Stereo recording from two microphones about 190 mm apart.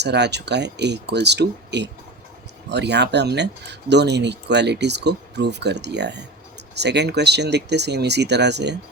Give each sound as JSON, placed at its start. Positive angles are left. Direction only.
{"t": 0.0, "sound": "speech", "side_deg": -65}